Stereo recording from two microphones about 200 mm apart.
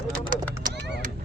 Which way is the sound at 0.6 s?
50° right (ahead or behind).